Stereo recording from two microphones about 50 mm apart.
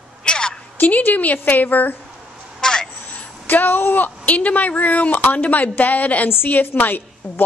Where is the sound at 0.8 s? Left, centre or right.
Left.